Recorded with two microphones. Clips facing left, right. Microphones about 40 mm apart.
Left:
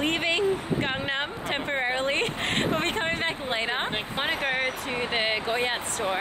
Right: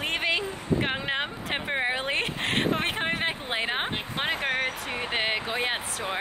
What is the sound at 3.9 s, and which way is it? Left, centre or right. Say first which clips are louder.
Speech: left 1 dB; centre.